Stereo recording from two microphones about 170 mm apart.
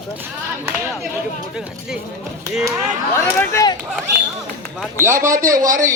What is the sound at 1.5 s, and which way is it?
Speech, 5° right (ahead or behind).